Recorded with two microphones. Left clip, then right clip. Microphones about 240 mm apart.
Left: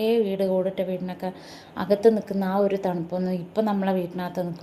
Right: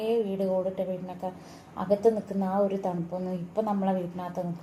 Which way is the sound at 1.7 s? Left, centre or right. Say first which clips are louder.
Left 4 dB; left.